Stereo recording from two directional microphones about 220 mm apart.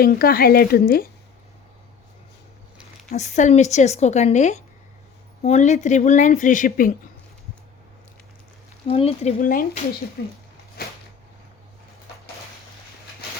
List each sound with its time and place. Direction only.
0.0 s a woman's voice: 45° left (ahead or behind)
3.1 s speech: 30° left (ahead or behind)
8.9 s speech: 25° left (ahead or behind)
9.4 s a woman's voice: 40° left (ahead or behind)